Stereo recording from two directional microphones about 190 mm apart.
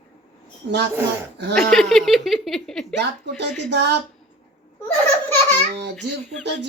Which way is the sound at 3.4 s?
65° right (ahead or behind).